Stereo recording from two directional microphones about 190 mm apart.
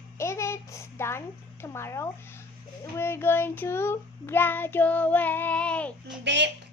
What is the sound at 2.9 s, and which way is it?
Child singing, 10° left (ahead or behind).